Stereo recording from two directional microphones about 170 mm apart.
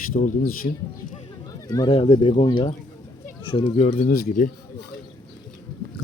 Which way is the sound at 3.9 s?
50° left (ahead or behind).